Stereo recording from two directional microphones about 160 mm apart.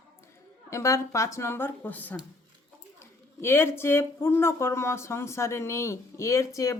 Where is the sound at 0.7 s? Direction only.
20° left (ahead or behind).